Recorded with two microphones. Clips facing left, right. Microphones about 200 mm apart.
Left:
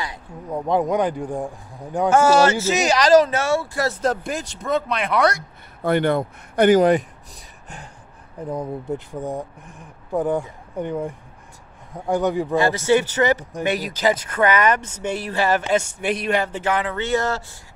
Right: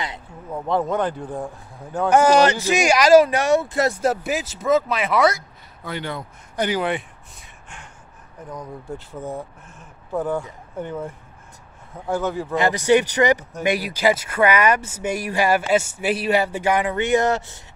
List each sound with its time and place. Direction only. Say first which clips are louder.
0.5 s speech: left 2 dB; 15° left (ahead or behind)
2.0 s speech: even; 15° right (ahead or behind)
4.0 s speech: right 1 dB; 5° right (ahead or behind)
5.8 s speech: left 11 dB; 55° left (ahead or behind); by 7.1 s 40° left (ahead or behind)
8.4 s speech: left 8 dB; 30° left (ahead or behind)
8.9 s speech: left 1 dB; 15° left (ahead or behind)
12.5 s speech: right 2 dB; 15° right (ahead or behind)